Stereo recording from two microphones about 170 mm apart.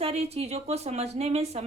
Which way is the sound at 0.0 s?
35° right (ahead or behind).